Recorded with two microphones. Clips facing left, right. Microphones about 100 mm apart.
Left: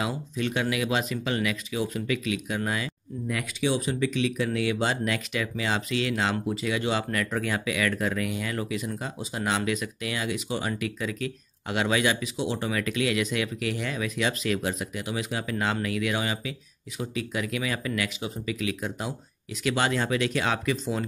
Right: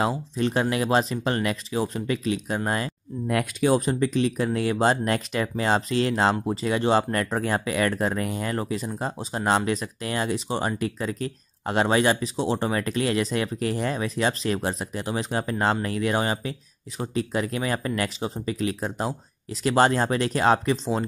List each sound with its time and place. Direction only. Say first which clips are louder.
0.0 s speech: right 5 dB; 35° right (ahead or behind)
3.3 s speech: right 6 dB; 50° right (ahead or behind); by 21.0 s 30° right (ahead or behind)